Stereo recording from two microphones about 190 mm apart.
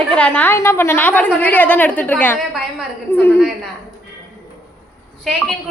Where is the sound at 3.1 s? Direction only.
10° left (ahead or behind).